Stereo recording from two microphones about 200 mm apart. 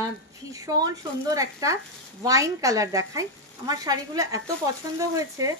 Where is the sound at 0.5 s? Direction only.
20° right (ahead or behind).